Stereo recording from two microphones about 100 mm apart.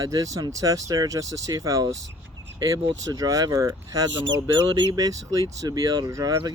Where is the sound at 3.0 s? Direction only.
35° right (ahead or behind).